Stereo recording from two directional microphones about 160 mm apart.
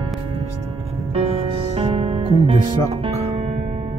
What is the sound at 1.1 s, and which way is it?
Music, 40° right (ahead or behind).